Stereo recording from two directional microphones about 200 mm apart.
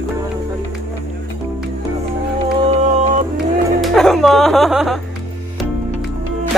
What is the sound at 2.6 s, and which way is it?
Music, 35° right (ahead or behind).